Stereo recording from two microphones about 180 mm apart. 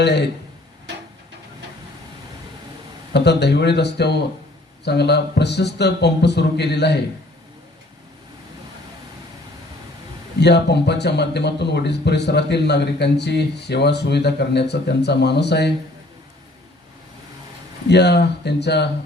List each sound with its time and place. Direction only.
0.0 s a man's voice: 70° left (ahead or behind)
3.1 s a man's voice: 70° left (ahead or behind)
10.4 s a man's voice: 70° left (ahead or behind)
17.8 s a man's voice: 70° left (ahead or behind)